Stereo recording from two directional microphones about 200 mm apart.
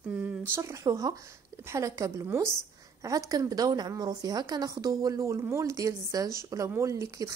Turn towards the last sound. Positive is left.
turn(degrees=-15)  # may be behind; listen again after turning